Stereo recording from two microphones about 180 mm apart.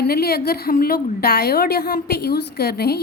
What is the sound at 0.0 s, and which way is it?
A woman's voice, 60° left (ahead or behind).